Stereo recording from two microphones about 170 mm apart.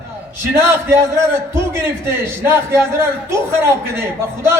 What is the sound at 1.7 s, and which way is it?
A man's voice, 15° right (ahead or behind).